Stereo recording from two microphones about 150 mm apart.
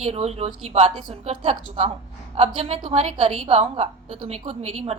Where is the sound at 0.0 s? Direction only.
45° right (ahead or behind).